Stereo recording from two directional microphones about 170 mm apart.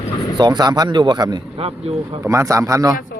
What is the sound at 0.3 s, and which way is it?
A man's voice, 25° right (ahead or behind).